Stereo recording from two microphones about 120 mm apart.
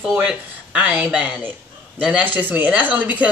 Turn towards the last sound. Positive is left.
turn(degrees=-15)  # may be behind; listen again after turning